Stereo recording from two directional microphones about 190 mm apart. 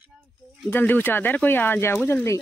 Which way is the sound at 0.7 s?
10° left (ahead or behind).